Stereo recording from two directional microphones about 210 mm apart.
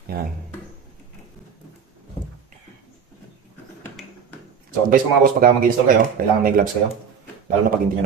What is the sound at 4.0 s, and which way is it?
Finger snapping, centre (ahead or behind).